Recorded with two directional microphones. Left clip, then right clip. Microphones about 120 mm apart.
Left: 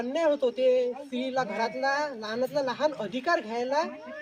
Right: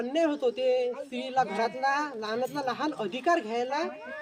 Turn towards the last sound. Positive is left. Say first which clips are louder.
# left 1 dB
turn(degrees=-40)  # may be behind; listen again after turning